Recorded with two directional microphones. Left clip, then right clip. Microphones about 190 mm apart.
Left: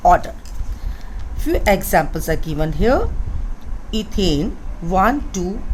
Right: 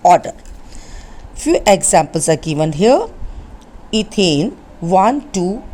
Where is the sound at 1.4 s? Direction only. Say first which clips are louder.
Right 5 dB; 35° right (ahead or behind).